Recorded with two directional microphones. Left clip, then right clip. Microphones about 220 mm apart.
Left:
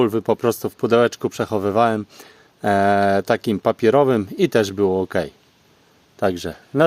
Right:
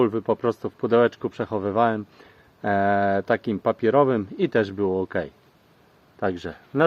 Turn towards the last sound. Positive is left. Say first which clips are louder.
# left 4 dB
turn(degrees=50)  # may be behind; listen again after turning